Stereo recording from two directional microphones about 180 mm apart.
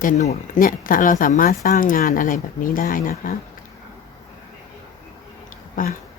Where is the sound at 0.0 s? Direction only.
40° left (ahead or behind).